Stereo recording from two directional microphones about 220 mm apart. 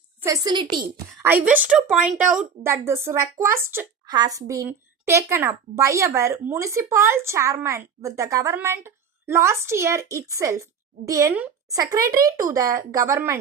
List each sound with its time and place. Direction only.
0.2 s a woman's voice: 15° right (ahead or behind)
1.3 s a woman's voice: 5° right (ahead or behind)